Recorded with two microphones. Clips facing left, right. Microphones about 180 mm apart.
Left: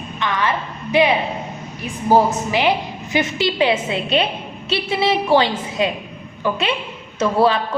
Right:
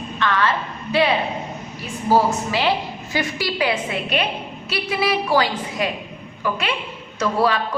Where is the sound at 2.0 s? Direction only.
20° left (ahead or behind).